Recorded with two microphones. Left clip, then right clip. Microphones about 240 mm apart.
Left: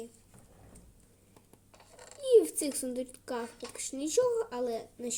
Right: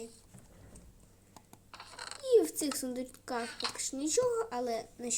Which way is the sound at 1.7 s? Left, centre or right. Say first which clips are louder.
Right 7 dB; right.